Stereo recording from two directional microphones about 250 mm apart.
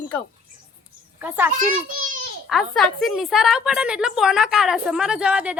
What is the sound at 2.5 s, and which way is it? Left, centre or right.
A woman's voice, centre.